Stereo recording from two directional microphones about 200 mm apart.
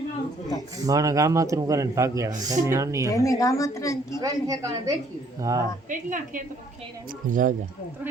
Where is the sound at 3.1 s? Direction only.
15° left (ahead or behind).